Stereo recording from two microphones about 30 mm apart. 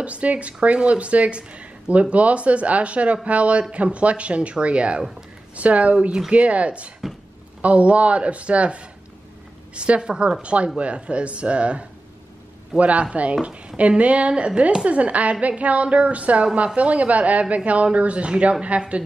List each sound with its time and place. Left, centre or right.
0.0 s a woman's voice: right
13.7 s speech: right
14.3 s speech: right
14.9 s speech: right